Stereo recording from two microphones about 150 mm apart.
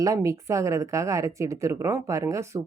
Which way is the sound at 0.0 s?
20° right (ahead or behind).